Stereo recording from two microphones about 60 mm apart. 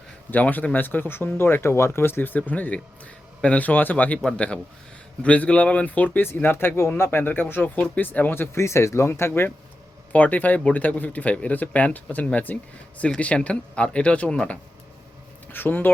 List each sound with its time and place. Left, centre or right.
0.3 s speech: left
4.2 s a man's voice: centre
6.2 s speech: left
10.1 s speech: left
15.5 s speech: left